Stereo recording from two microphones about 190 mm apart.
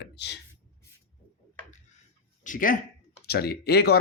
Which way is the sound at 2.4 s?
45° left (ahead or behind).